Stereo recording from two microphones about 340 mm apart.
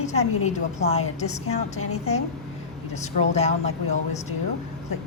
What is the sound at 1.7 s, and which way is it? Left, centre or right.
Speech, left.